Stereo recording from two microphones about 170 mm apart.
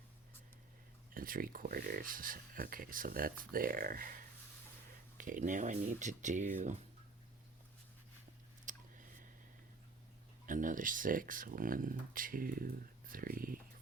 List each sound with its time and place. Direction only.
1.1 s speech: 55° right (ahead or behind)
8.7 s a sound: 50° right (ahead or behind)
10.4 s speech: 50° right (ahead or behind)